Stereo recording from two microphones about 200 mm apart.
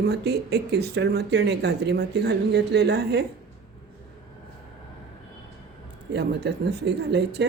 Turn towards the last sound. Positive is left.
turn(degrees=-55)  # may be behind; listen again after turning